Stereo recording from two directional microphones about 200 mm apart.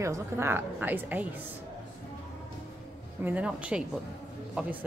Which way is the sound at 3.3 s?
5° right (ahead or behind).